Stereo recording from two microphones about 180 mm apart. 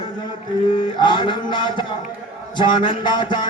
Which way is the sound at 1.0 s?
25° left (ahead or behind).